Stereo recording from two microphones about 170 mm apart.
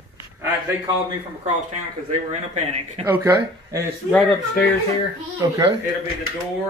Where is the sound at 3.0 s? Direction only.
15° right (ahead or behind).